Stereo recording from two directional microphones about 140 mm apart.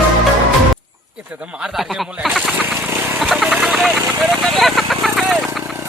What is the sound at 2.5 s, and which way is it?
Vehicle, 10° right (ahead or behind).